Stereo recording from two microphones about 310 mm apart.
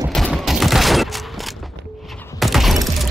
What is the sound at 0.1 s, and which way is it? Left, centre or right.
Fusillade, centre.